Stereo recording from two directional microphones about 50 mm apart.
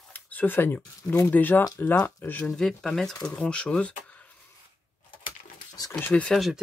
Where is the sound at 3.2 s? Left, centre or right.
Left.